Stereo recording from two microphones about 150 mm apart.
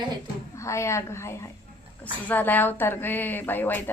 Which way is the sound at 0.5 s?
20° left (ahead or behind).